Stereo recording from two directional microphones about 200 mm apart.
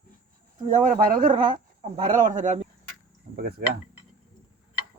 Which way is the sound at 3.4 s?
50° right (ahead or behind).